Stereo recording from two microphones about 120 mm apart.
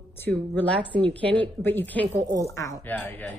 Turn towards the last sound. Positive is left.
turn(degrees=15)  # may be behind; listen again after turning